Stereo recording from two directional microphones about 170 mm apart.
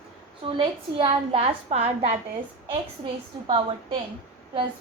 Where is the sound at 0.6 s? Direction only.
35° right (ahead or behind).